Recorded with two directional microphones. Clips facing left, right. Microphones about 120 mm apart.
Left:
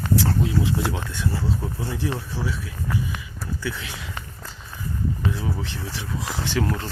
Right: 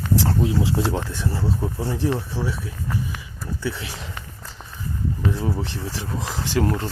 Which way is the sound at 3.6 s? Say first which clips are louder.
Right 4 dB; 25° right (ahead or behind).